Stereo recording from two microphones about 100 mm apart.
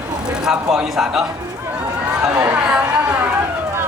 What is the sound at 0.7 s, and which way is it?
Speech, 5° right (ahead or behind).